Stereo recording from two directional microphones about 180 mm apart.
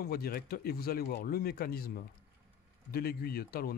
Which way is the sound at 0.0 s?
55° left (ahead or behind).